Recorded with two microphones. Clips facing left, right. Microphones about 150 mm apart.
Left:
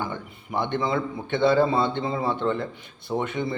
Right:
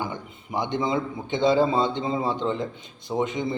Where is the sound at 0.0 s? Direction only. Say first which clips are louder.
Even; 15° right (ahead or behind).